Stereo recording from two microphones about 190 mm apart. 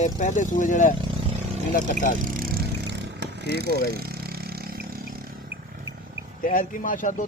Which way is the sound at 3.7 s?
55° left (ahead or behind).